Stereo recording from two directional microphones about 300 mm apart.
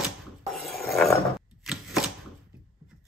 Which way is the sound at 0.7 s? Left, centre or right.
Centre.